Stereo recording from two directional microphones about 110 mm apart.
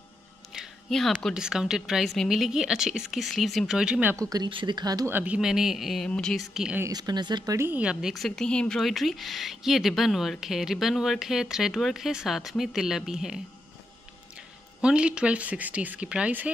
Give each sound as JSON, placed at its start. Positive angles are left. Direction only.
{"t": 0.5, "sound": "music", "side_deg": 0}
{"t": 1.3, "sound": "a woman's voice", "side_deg": -5}
{"t": 4.5, "sound": "speech", "side_deg": -45}
{"t": 5.0, "sound": "a woman's voice", "side_deg": -15}
{"t": 6.5, "sound": "a woman's voice", "side_deg": -5}
{"t": 6.9, "sound": "speech", "side_deg": -40}
{"t": 7.5, "sound": "speech", "side_deg": -20}
{"t": 7.8, "sound": "a woman's voice", "side_deg": -5}
{"t": 14.8, "sound": "speech", "side_deg": -10}